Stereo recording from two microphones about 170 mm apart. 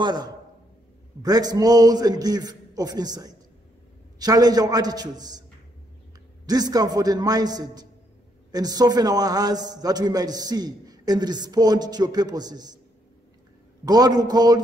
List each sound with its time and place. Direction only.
0.0 s a man's voice: 25° right (ahead or behind)
6.4 s a man's voice: 25° right (ahead or behind)
13.8 s a man's voice: 25° right (ahead or behind)